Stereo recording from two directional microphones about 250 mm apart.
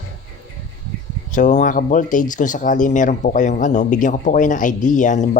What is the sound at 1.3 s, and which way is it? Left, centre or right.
Speech, left.